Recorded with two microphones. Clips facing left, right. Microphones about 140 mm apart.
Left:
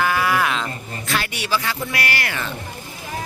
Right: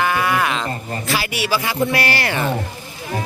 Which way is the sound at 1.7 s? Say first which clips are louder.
Right 6 dB; 30° right (ahead or behind).